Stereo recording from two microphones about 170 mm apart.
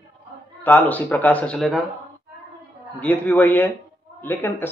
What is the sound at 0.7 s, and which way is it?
Speech, 10° left (ahead or behind).